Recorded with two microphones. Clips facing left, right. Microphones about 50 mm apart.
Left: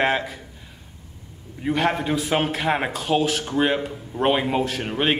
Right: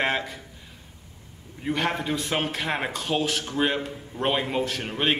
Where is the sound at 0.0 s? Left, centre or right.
Centre.